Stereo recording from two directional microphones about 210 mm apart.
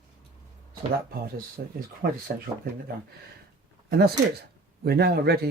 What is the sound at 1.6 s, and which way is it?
Speech, 45° right (ahead or behind).